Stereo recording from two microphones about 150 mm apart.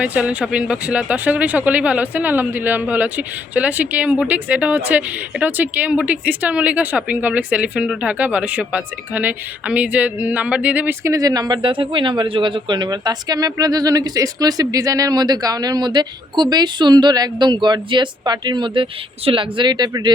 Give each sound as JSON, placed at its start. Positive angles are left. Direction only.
{"t": 0.0, "sound": "speech", "side_deg": -10}